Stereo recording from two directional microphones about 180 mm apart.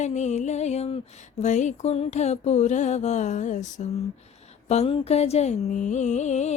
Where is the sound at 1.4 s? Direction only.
40° left (ahead or behind).